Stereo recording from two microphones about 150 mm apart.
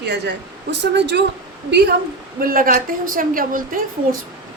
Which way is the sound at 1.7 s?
90° right.